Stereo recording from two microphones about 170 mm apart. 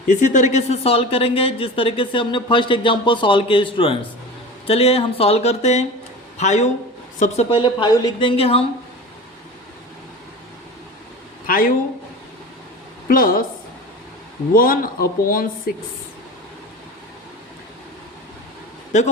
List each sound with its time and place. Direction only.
0.1 s speech: 45° left (ahead or behind)
7.5 s speech: 25° left (ahead or behind)
11.4 s speech: 55° left (ahead or behind)
13.1 s speech: 55° left (ahead or behind)
14.5 s speech: 60° left (ahead or behind)